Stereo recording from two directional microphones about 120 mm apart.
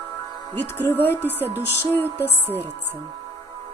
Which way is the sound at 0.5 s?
15° left (ahead or behind).